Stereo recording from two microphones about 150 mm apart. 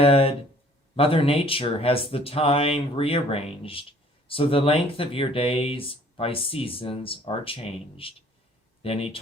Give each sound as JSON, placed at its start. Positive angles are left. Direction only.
{"t": 0.0, "sound": "speech", "side_deg": 40}